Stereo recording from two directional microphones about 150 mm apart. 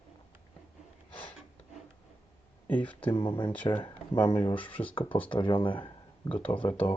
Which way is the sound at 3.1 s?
35° left (ahead or behind).